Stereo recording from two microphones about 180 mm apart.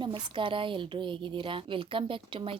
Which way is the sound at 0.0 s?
30° right (ahead or behind).